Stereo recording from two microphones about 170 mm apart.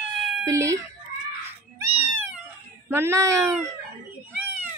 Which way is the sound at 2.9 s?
15° right (ahead or behind).